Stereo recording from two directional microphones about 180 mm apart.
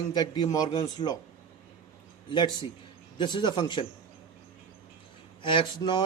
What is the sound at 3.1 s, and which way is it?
Speech, 25° left (ahead or behind).